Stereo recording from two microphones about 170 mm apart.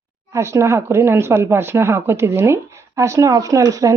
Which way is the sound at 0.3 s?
15° right (ahead or behind).